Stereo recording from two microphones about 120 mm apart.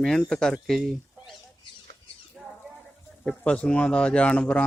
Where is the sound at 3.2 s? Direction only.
10° left (ahead or behind).